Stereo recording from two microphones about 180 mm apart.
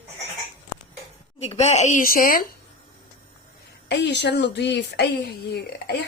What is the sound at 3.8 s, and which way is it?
Speech, 70° left (ahead or behind).